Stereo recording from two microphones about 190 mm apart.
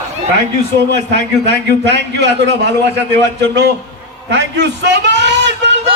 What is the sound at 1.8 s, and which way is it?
A man's voice, 65° right (ahead or behind).